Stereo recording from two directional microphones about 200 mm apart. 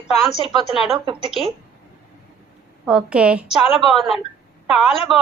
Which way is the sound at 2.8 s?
5° right (ahead or behind).